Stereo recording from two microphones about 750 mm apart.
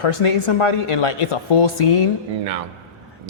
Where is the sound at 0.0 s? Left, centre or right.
Left.